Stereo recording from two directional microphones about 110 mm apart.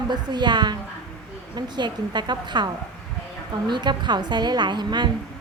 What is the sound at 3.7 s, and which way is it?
A woman's voice, 45° right (ahead or behind).